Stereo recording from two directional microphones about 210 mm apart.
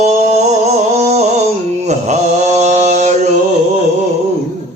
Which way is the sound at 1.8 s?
35° right (ahead or behind).